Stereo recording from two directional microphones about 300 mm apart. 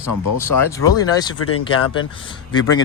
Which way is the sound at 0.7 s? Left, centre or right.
Centre.